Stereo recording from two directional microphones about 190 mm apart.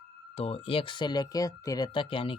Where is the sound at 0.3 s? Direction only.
30° left (ahead or behind).